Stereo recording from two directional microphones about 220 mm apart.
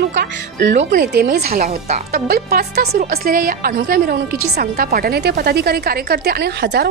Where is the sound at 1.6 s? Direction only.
30° right (ahead or behind).